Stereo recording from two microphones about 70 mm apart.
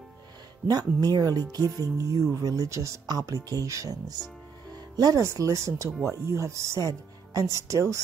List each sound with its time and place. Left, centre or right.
0.7 s speech: right
4.9 s speech: right
5.2 s speech: right